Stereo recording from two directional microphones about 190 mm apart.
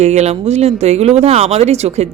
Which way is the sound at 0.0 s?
35° right (ahead or behind).